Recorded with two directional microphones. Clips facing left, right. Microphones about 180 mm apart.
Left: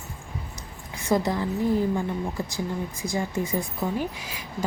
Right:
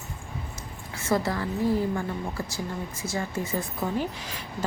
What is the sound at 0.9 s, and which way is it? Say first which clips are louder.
Speech: left 2 dB; 15° left (ahead or behind).